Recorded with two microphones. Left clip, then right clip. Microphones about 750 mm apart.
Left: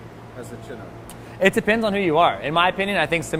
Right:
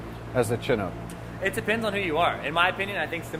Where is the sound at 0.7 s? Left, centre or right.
Right.